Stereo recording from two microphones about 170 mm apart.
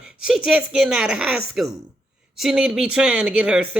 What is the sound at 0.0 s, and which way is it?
A man's voice, 5° right (ahead or behind).